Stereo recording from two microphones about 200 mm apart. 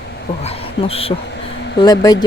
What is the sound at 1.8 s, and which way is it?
Speech, 20° left (ahead or behind).